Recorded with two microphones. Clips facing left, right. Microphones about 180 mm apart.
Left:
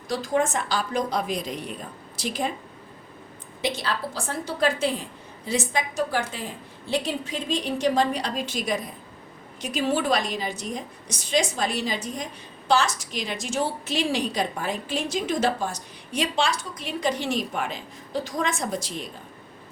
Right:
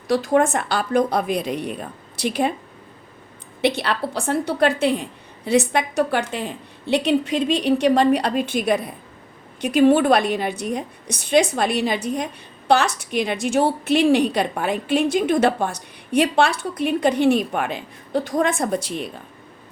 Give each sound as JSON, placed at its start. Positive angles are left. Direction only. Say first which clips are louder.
{"t": 0.1, "sound": "a woman's voice", "louder": "right 6 dB", "side_deg": -60}
{"t": 3.6, "sound": "a woman's voice", "louder": "right 7 dB", "side_deg": -65}